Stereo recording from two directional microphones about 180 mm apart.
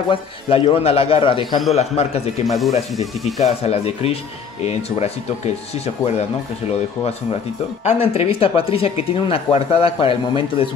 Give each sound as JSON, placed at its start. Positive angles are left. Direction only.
{"t": 0.1, "sound": "speech", "side_deg": 30}
{"t": 2.4, "sound": "speech", "side_deg": 0}
{"t": 3.3, "sound": "speech", "side_deg": 35}
{"t": 7.8, "sound": "speech", "side_deg": 35}